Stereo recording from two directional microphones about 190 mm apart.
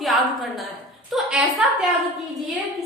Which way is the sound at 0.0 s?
Centre (ahead or behind).